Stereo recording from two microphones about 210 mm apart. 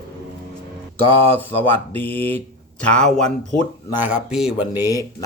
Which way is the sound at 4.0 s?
5° right (ahead or behind).